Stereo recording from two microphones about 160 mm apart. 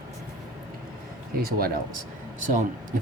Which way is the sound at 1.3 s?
65° right (ahead or behind).